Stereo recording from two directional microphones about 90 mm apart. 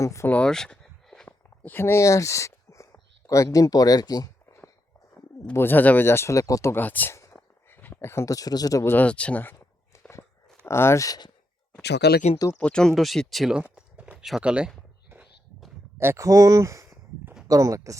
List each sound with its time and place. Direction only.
0.0 s speech: 35° left (ahead or behind)
0.3 s a sound: 10° left (ahead or behind)
1.6 s speech: 25° left (ahead or behind); by 4.3 s 45° left (ahead or behind)
5.5 s speech: 20° left (ahead or behind)
6.8 s speech: 20° left (ahead or behind); by 8.8 s 45° left (ahead or behind)
8.8 s speech: 25° left (ahead or behind)
9.0 s a sound: 15° left (ahead or behind)
10.7 s speech: 30° left (ahead or behind)
12.5 s speech: 10° left (ahead or behind)
13.7 s a sound: 10° right (ahead or behind)
16.0 s speech: 30° right (ahead or behind)